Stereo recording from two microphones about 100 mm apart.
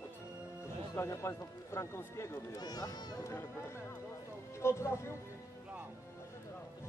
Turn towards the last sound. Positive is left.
turn(degrees=25)  # may be behind; listen again after turning